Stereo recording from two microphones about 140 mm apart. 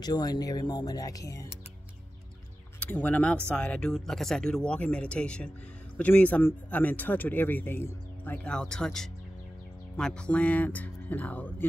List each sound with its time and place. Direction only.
0.0 s speech: 25° left (ahead or behind)
2.8 s speech: 10° left (ahead or behind)